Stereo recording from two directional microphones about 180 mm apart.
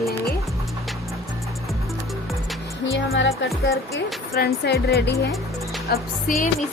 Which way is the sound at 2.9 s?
90° left.